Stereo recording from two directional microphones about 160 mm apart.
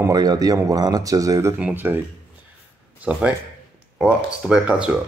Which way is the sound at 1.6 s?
10° right (ahead or behind).